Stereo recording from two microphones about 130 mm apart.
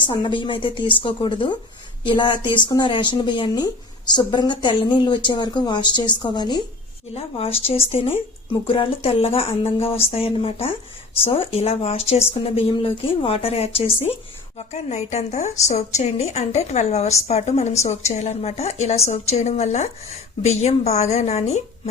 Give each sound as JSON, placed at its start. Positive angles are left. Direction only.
{"t": 0.0, "sound": "speech", "side_deg": 40}
{"t": 7.1, "sound": "speech", "side_deg": 50}
{"t": 14.7, "sound": "a woman's voice", "side_deg": 60}